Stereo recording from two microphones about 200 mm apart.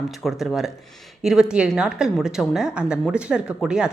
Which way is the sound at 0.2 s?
Centre (ahead or behind).